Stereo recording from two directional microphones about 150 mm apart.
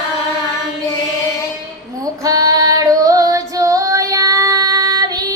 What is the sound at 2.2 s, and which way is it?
Female singing, 20° right (ahead or behind).